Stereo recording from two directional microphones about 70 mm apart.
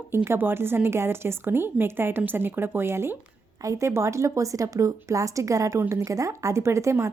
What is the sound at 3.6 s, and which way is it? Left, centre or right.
A woman's voice, right.